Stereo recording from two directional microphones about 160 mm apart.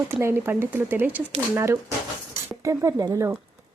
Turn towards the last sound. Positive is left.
turn(degrees=-20)  # may be behind; listen again after turning